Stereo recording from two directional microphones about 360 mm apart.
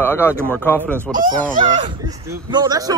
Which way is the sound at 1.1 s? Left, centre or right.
Right.